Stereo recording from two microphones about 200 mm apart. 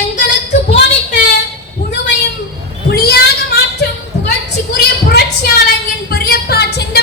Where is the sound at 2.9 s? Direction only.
50° left (ahead or behind).